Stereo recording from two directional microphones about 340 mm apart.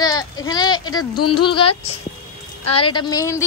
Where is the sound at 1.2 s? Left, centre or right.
Left.